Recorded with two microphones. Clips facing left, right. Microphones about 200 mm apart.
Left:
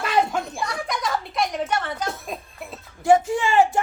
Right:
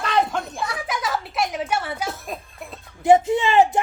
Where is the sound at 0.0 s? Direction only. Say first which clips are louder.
Even; 5° left (ahead or behind).